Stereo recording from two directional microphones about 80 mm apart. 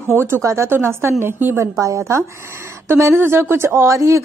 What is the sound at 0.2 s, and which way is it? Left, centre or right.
A woman's voice, right.